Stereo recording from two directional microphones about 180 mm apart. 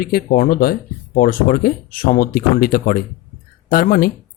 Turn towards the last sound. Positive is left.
turn(degrees=50)  # may be behind; listen again after turning